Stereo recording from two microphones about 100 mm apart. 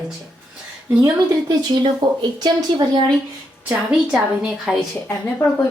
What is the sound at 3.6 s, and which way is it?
A woman's voice, 10° right (ahead or behind).